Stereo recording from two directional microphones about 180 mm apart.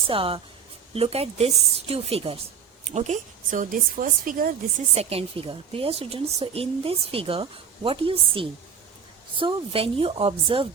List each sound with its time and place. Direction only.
0.1 s a woman's voice: 30° right (ahead or behind); by 4.5 s 50° right (ahead or behind)
4.9 s a woman's voice: 35° right (ahead or behind)